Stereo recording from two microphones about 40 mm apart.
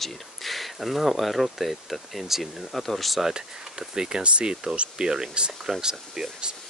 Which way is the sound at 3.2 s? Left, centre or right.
Centre.